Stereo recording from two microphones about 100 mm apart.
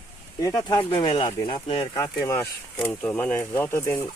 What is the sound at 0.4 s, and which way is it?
Speech, 40° left (ahead or behind).